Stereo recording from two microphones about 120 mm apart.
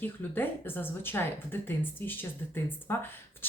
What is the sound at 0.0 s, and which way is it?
Speech, 15° left (ahead or behind).